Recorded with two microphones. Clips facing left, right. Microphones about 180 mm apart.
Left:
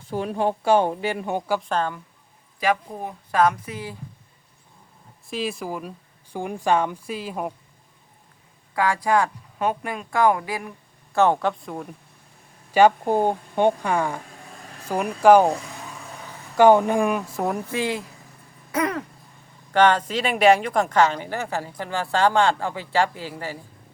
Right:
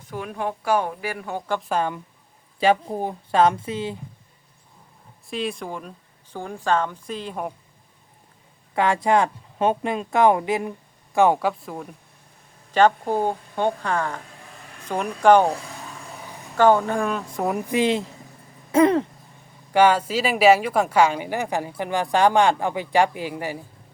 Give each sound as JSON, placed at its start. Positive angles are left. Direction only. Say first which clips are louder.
{"t": 0.0, "sound": "speech", "louder": "left 5 dB", "side_deg": 30}
{"t": 1.6, "sound": "a woman's voice", "louder": "right 1 dB", "side_deg": -10}
{"t": 2.6, "sound": "speech", "louder": "right 4 dB", "side_deg": -30}
{"t": 5.3, "sound": "speech", "louder": "even", "side_deg": 0}
{"t": 8.7, "sound": "speech", "louder": "right 2 dB", "side_deg": -25}
{"t": 11.1, "sound": "a woman's voice", "louder": "right 1 dB", "side_deg": -10}
{"t": 12.7, "sound": "speech", "louder": "left 2 dB", "side_deg": 10}
{"t": 16.1, "sound": "a sound", "louder": "right 1 dB", "side_deg": -15}
{"t": 16.6, "sound": "speech", "louder": "left 2 dB", "side_deg": 15}
{"t": 17.3, "sound": "speech", "louder": "right 1 dB", "side_deg": 0}
{"t": 17.7, "sound": "speech", "louder": "right 5 dB", "side_deg": -20}
{"t": 19.7, "sound": "a woman's voice", "louder": "right 1 dB", "side_deg": -10}